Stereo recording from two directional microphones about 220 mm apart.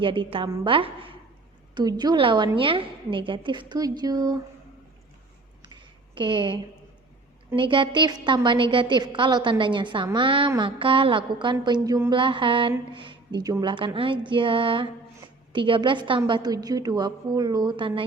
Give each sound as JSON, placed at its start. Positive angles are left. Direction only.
{"t": 0.0, "sound": "a woman's voice", "side_deg": -25}
{"t": 6.1, "sound": "a woman's voice", "side_deg": -20}